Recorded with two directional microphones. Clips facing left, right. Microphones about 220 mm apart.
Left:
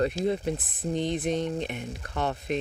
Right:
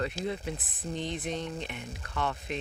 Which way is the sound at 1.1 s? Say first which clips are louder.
Left 7 dB; 55° left (ahead or behind).